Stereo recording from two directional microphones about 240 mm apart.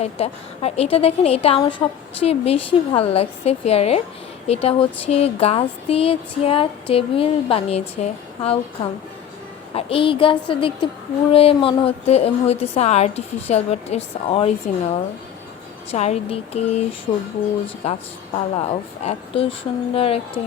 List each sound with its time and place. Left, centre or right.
0.0 s speech: left
15.9 s speech: left